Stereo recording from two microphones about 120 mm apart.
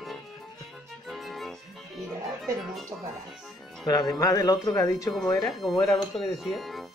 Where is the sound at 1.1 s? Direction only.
Centre (ahead or behind).